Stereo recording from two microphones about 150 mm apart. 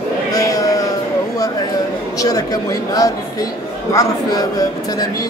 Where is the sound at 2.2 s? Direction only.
25° left (ahead or behind).